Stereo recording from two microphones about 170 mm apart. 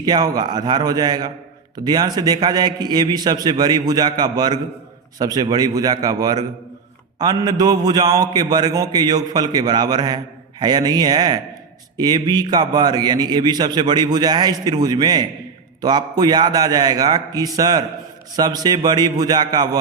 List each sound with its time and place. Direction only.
0.0 s a man's voice: 25° right (ahead or behind)